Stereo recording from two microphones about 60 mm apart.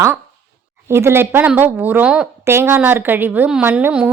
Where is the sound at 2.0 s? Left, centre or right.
Centre.